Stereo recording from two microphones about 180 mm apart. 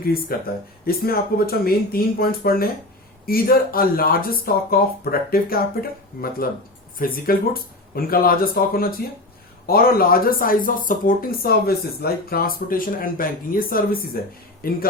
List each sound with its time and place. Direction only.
0.0 s speech: 55° left (ahead or behind)